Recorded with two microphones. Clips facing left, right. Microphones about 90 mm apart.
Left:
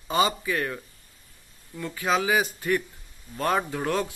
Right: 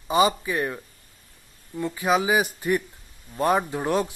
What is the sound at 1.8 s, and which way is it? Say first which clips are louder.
Speech: right 3 dB; 20° right (ahead or behind).